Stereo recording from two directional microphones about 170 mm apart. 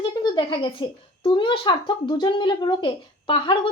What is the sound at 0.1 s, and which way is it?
A child's voice, 25° left (ahead or behind).